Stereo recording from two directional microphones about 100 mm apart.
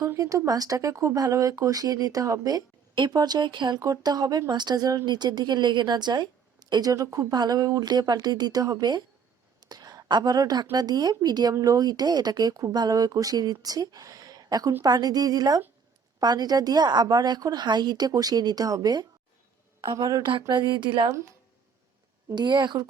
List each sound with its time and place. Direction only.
0.0 s speech: 30° right (ahead or behind); by 3.8 s 50° right (ahead or behind)
3.8 s a woman's voice: 40° right (ahead or behind)
22.3 s speech: 50° right (ahead or behind)